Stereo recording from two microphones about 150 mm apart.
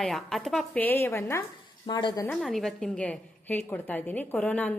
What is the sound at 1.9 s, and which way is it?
Speech, 30° left (ahead or behind).